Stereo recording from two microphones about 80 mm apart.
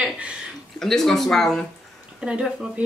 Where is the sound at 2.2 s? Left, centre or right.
Centre.